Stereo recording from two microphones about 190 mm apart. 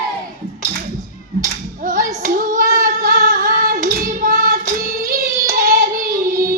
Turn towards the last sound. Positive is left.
turn(degrees=-50)  # may be behind; listen again after turning